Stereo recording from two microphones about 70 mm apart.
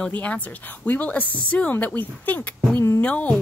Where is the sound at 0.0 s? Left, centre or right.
Centre.